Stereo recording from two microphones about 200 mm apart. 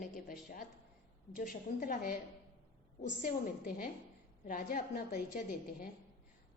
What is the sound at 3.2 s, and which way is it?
A woman's voice, 45° left (ahead or behind).